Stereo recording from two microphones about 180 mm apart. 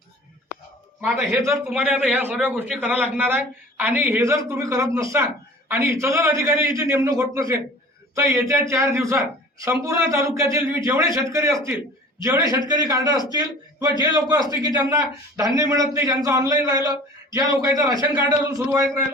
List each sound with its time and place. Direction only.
1.0 s a man's voice: 10° right (ahead or behind)